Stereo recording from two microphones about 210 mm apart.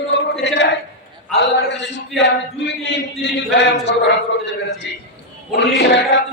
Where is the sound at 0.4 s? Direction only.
55° left (ahead or behind).